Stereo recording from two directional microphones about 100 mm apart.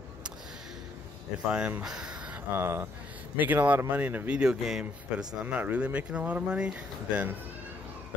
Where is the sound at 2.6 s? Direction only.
25° right (ahead or behind).